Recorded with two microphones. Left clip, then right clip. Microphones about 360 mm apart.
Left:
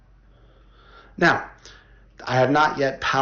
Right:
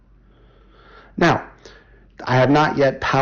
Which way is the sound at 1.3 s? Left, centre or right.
Centre.